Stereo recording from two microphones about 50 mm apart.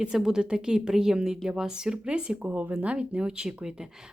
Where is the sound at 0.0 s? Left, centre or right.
Centre.